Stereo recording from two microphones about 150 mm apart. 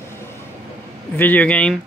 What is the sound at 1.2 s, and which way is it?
Speech, 10° left (ahead or behind).